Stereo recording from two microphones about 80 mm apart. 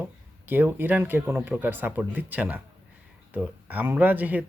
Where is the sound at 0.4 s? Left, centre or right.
Right.